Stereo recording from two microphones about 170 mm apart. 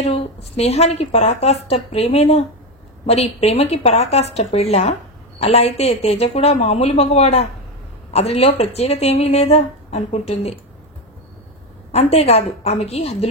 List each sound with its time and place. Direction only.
0.0 s a woman's voice: 35° left (ahead or behind)
11.9 s a woman's voice: 35° left (ahead or behind)